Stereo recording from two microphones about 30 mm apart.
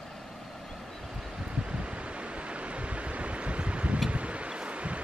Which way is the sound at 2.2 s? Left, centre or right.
Right.